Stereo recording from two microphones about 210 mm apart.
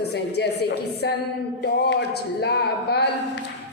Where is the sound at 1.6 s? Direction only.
55° left (ahead or behind).